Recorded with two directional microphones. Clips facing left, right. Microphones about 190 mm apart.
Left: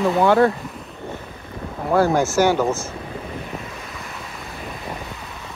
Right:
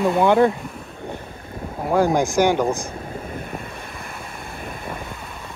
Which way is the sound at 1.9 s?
15° right (ahead or behind).